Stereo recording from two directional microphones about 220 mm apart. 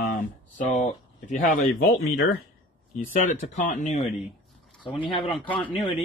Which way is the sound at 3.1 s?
35° left (ahead or behind).